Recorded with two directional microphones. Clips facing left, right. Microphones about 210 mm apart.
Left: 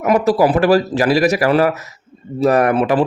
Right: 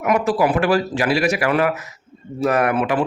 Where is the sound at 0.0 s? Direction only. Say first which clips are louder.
Left 4 dB; 40° left (ahead or behind).